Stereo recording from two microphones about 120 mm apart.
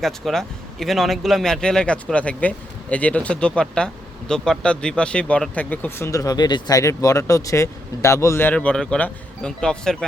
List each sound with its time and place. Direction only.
0.0 s a man's voice: centre (ahead or behind)
6.1 s speech: 30° left (ahead or behind); by 10.1 s 5° left (ahead or behind)